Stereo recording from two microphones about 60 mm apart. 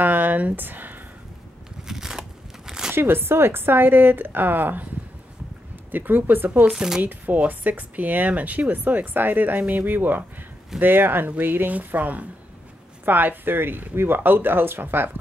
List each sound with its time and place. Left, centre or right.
0.0 s a sound: right
1.9 s a sound: centre
2.9 s speech: right
5.9 s speech: right
6.7 s speech: centre
7.0 s speech: right